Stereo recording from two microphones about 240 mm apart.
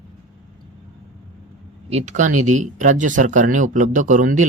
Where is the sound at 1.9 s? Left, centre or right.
Right.